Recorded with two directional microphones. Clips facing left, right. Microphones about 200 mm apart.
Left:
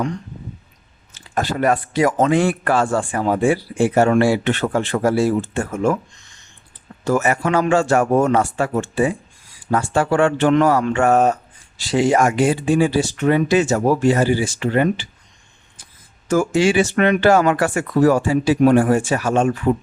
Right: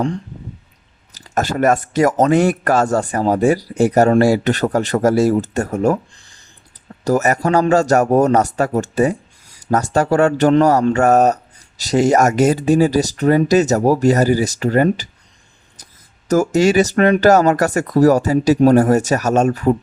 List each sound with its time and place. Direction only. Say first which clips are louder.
1.1 s a man's voice: right 3 dB; 45° right (ahead or behind)
15.8 s a sound: right 3 dB; 40° right (ahead or behind)
16.3 s a man's voice: right 3 dB; 40° right (ahead or behind)